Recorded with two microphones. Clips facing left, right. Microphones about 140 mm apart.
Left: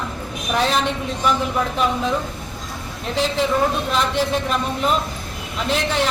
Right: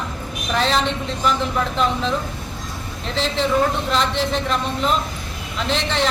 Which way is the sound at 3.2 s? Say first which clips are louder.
Even; 10° left (ahead or behind).